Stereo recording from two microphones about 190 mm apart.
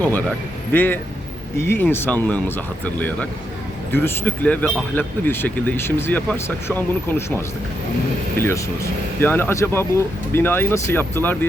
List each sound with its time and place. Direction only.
0.7 s speech: 10° left (ahead or behind)